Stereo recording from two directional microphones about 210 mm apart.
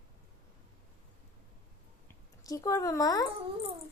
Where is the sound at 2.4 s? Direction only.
15° left (ahead or behind).